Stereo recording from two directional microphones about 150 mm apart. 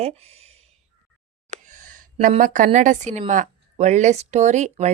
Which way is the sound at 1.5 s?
55° right (ahead or behind).